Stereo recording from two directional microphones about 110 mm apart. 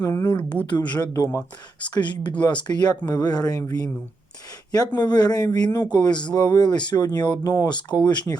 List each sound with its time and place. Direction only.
0.0 s speech: 25° left (ahead or behind)
0.7 s speech: 40° left (ahead or behind)
1.8 s speech: 45° left (ahead or behind)
4.9 s speech: 40° left (ahead or behind)